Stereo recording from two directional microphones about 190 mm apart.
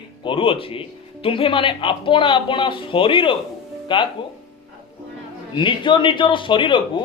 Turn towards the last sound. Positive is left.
turn(degrees=25)  # may be behind; listen again after turning